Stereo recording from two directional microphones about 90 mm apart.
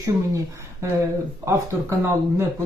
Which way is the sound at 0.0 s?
35° right (ahead or behind).